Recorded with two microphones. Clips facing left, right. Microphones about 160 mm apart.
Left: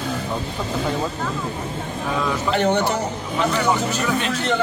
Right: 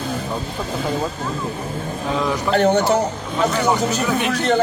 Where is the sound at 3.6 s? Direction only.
Centre (ahead or behind).